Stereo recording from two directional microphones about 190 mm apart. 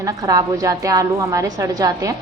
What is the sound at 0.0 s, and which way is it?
A woman's voice, 15° right (ahead or behind).